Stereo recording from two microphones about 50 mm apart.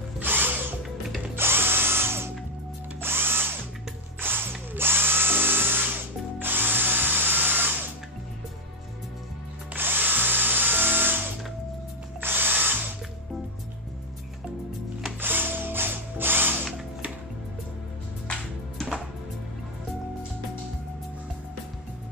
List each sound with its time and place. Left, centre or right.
0.2 s drill: right
4.2 s ratchet: right
4.7 s drill: right
9.8 s drill: right
12.2 s music: right
15.1 s ratchet: right